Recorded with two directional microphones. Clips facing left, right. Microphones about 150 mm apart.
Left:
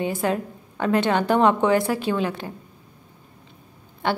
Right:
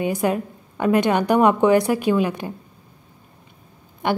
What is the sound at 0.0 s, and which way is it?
A woman's voice, 15° right (ahead or behind).